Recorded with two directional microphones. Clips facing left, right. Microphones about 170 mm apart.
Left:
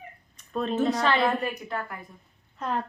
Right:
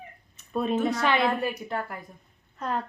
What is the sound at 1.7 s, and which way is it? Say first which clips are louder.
Speech: right 1 dB; 30° right (ahead or behind).